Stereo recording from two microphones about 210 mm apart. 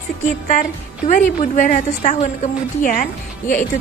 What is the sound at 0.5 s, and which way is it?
A woman's voice, 40° left (ahead or behind).